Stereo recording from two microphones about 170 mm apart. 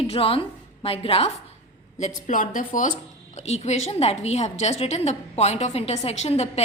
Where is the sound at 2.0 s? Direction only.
50° left (ahead or behind).